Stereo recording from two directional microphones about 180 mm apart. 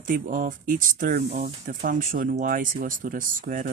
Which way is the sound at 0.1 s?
50° right (ahead or behind).